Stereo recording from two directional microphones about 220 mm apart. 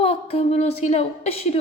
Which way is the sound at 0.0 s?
25° left (ahead or behind).